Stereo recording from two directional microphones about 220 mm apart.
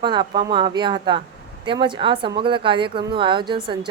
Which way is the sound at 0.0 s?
20° right (ahead or behind).